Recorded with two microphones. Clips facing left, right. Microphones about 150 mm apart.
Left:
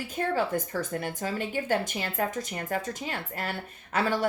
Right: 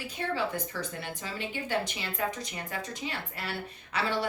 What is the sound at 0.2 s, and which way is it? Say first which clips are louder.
Speech: left 4 dB; 45° left (ahead or behind).